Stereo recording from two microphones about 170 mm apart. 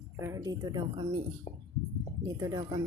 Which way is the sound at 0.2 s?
20° right (ahead or behind).